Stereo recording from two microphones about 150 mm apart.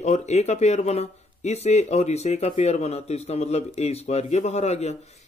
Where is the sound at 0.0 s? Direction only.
50° left (ahead or behind).